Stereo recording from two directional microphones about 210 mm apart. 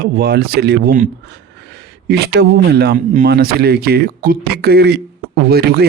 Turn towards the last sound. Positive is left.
turn(degrees=-50)  # may be behind; listen again after turning